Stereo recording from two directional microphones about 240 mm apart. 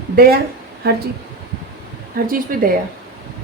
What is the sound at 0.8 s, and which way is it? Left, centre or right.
Speech, right.